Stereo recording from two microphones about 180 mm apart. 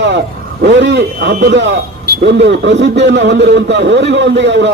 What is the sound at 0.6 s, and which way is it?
A man's voice, 75° right (ahead or behind).